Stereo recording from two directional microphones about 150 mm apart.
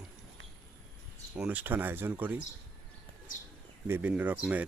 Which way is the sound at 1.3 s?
10° right (ahead or behind).